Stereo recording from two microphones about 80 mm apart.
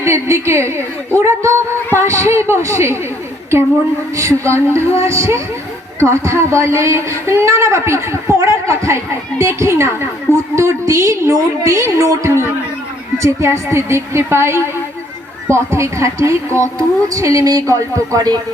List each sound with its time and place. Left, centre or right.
0.0 s a man's voice: right
4.1 s a man's voice: right